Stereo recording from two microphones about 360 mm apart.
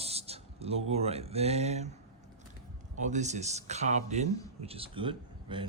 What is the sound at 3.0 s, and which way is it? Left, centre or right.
Speech, centre.